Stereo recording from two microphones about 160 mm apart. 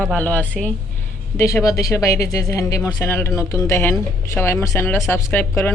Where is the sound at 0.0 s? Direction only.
10° left (ahead or behind).